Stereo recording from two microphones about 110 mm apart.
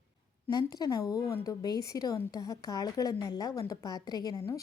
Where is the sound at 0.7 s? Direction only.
35° left (ahead or behind).